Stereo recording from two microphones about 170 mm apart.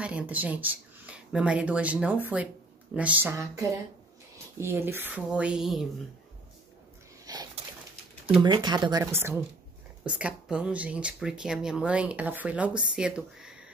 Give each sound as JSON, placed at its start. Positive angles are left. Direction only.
{"t": 0.0, "sound": "speech", "side_deg": -5}
{"t": 7.3, "sound": "pigeon", "side_deg": -20}
{"t": 8.4, "sound": "speech", "side_deg": -25}